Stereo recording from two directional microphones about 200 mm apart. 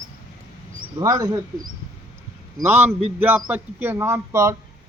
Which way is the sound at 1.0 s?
15° right (ahead or behind).